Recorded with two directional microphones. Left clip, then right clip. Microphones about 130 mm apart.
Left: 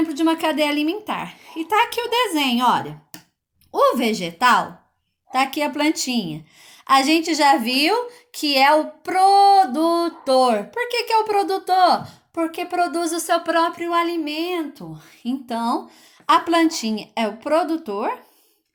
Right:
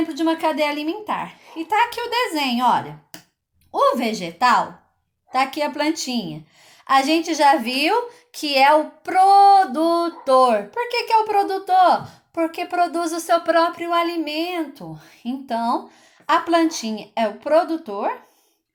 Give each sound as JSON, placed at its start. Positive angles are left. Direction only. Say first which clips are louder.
{"t": 0.0, "sound": "a woman's voice", "louder": "left 1 dB", "side_deg": 30}